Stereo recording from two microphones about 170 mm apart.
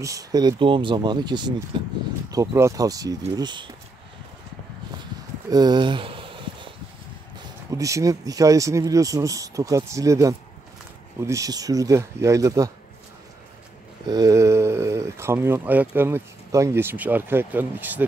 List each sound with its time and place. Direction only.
0.0 s speech: 20° right (ahead or behind)
2.3 s speech: 20° right (ahead or behind)
5.5 s a sound: 25° right (ahead or behind)
7.7 s speech: 20° right (ahead or behind)
14.0 s speech: 20° right (ahead or behind)